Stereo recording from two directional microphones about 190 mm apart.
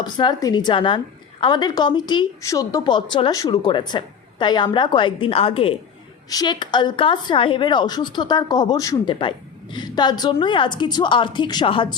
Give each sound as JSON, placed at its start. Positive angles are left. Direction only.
{"t": 0.0, "sound": "a woman's voice", "side_deg": 25}